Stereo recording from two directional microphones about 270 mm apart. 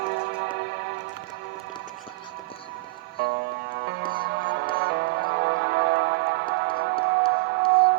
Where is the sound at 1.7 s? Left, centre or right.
Centre.